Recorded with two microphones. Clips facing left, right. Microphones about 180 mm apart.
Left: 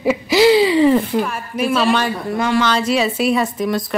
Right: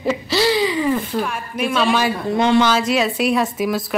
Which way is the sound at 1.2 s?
Centre (ahead or behind).